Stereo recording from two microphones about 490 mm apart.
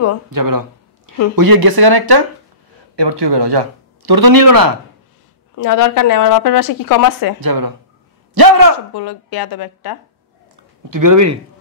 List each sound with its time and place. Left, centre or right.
0.3 s a sound: right
1.3 s speech: right
5.6 s speech: left
7.3 s a man's voice: right
8.9 s speech: left
10.5 s a sound: right